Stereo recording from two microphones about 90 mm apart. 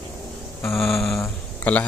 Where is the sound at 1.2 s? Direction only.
15° left (ahead or behind).